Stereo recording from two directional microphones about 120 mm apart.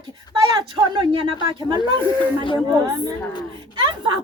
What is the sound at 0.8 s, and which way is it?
A woman's voice, 45° right (ahead or behind).